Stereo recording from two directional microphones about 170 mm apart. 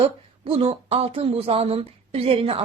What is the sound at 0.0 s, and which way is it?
Speech, 30° right (ahead or behind).